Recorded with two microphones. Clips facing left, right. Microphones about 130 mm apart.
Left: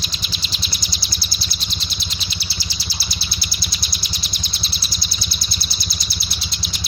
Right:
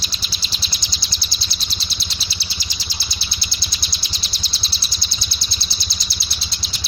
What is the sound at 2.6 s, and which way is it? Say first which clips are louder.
Bird: left 2 dB; 20° right (ahead or behind).